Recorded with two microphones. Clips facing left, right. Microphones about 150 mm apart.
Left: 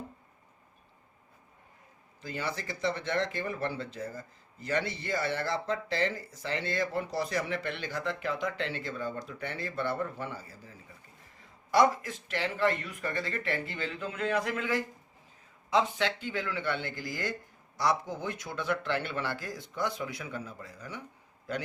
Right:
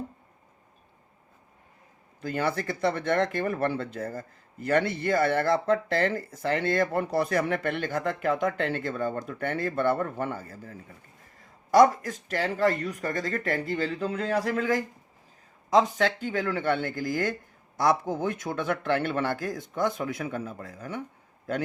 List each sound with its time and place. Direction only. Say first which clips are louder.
2.2 s speech: right 8 dB; 55° right (ahead or behind)